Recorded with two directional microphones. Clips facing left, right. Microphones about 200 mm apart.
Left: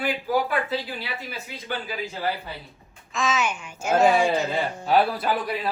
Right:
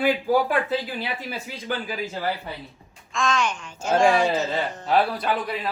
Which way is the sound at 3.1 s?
5° left (ahead or behind).